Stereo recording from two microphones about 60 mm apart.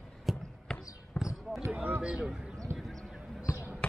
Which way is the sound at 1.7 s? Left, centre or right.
Right.